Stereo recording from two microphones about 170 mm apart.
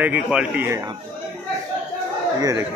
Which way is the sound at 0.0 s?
5° right (ahead or behind).